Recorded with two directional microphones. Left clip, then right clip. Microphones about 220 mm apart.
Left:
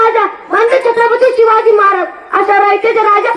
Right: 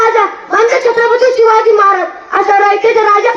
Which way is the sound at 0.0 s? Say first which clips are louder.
Even; 50° left (ahead or behind).